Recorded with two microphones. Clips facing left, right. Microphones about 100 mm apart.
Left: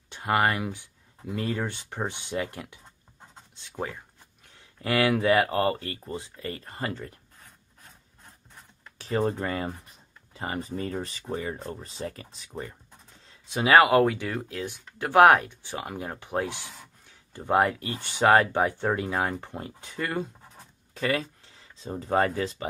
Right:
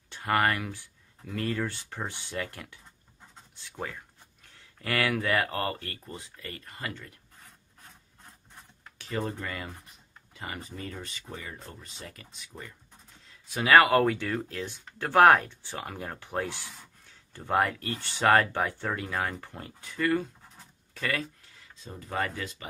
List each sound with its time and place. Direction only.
0.1 s speech: 20° left (ahead or behind); by 7.1 s 35° left (ahead or behind)
8.9 s speech: 35° left (ahead or behind)